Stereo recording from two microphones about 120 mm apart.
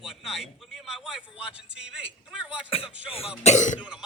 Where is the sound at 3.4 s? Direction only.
80° left.